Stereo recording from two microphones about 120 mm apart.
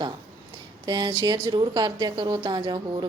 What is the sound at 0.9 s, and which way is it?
A woman's voice, 35° right (ahead or behind).